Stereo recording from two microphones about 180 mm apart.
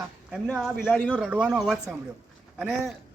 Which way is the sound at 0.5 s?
5° right (ahead or behind).